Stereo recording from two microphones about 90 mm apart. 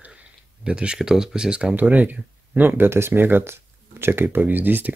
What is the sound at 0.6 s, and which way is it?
Speech, 10° right (ahead or behind).